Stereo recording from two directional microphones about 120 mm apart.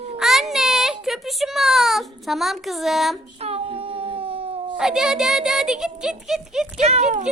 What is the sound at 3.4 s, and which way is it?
Baby cry, 55° right (ahead or behind).